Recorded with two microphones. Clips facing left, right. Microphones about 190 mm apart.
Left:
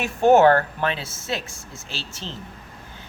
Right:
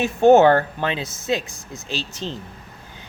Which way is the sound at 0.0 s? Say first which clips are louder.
Right 2 dB; 20° right (ahead or behind).